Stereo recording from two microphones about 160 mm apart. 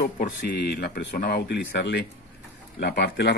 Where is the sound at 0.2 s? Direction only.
70° left (ahead or behind).